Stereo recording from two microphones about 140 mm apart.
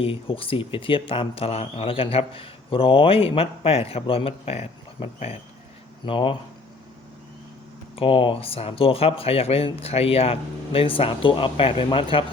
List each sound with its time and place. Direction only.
0.0 s speech: 40° left (ahead or behind)
7.9 s speech: 40° left (ahead or behind)